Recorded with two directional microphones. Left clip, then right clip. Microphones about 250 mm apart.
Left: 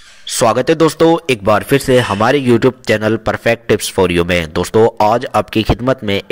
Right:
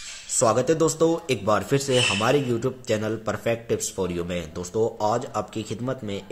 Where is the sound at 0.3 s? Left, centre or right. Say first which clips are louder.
Left 9 dB; left.